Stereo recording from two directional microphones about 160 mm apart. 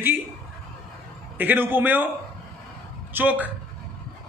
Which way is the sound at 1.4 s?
10° right (ahead or behind).